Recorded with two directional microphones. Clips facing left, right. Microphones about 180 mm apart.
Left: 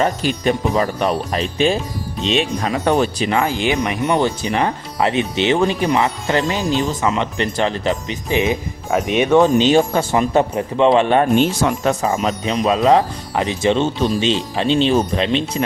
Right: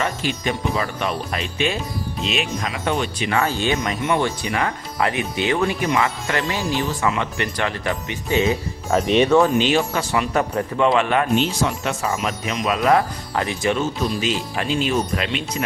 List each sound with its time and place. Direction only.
0.0 s speech: 40° left (ahead or behind)
3.4 s speech: 15° left (ahead or behind)
4.0 s speech: 30° left (ahead or behind); by 9.4 s 10° left (ahead or behind)
9.4 s speech: 25° left (ahead or behind)
11.3 s speech: 45° left (ahead or behind)
12.0 s speech: 30° left (ahead or behind)